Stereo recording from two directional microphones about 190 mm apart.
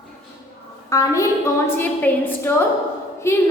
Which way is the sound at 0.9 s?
15° left (ahead or behind).